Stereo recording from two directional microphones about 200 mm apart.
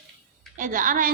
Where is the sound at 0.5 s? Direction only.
40° right (ahead or behind).